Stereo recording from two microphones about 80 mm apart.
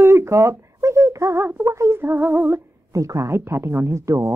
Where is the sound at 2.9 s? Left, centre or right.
Right.